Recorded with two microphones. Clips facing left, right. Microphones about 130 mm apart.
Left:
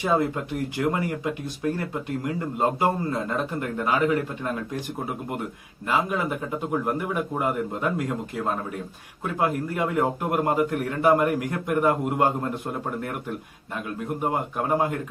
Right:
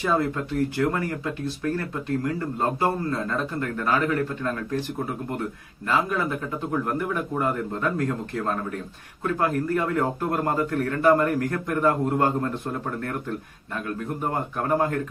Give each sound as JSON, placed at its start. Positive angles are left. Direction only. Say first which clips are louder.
{"t": 0.0, "sound": "speech", "louder": "left 1 dB", "side_deg": 15}
{"t": 5.9, "sound": "speech", "louder": "even", "side_deg": 15}
{"t": 14.2, "sound": "speech", "louder": "left 2 dB", "side_deg": 10}